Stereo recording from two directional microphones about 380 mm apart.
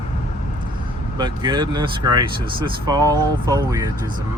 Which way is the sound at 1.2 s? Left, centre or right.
Centre.